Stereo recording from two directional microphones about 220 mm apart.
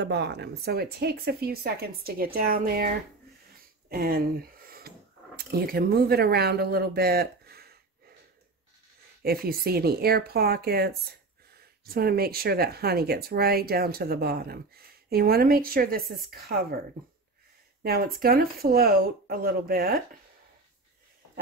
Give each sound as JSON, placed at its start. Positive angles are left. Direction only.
{"t": 0.0, "sound": "speech", "side_deg": -50}
{"t": 3.9, "sound": "speech", "side_deg": -45}
{"t": 9.2, "sound": "speech", "side_deg": -45}
{"t": 17.8, "sound": "speech", "side_deg": -45}